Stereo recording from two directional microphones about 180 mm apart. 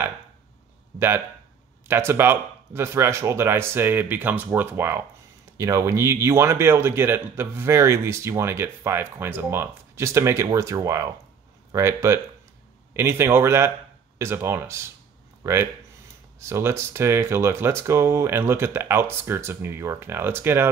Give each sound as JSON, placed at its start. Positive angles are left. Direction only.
{"t": 0.9, "sound": "speech", "side_deg": -15}